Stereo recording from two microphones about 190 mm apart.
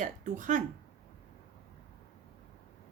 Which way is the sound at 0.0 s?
45° right (ahead or behind).